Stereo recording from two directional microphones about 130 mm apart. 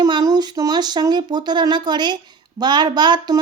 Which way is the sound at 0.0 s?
30° right (ahead or behind).